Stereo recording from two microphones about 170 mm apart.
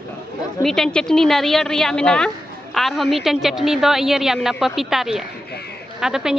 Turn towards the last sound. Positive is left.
turn(degrees=-5)  # may be behind; listen again after turning